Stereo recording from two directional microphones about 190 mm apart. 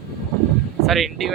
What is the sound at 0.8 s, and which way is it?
Speech, centre (ahead or behind).